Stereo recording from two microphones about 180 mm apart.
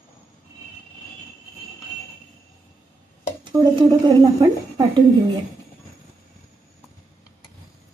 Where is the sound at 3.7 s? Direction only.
25° right (ahead or behind).